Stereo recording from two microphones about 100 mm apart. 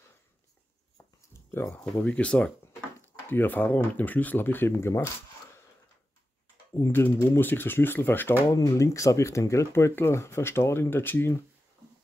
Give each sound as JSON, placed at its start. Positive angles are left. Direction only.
{"t": 0.9, "sound": "a sound", "side_deg": 30}
{"t": 1.8, "sound": "speech", "side_deg": 15}
{"t": 6.7, "sound": "speech", "side_deg": 20}
{"t": 8.5, "sound": "speech", "side_deg": 35}